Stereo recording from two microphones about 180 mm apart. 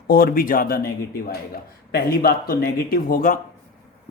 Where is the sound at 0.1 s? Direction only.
55° left (ahead or behind).